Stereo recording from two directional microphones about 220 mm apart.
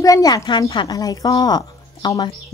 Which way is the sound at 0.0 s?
15° left (ahead or behind).